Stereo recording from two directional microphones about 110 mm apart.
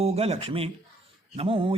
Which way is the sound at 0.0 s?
65° right (ahead or behind).